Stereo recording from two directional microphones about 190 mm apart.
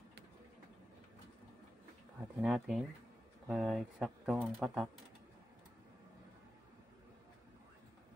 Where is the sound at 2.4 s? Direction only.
Centre (ahead or behind).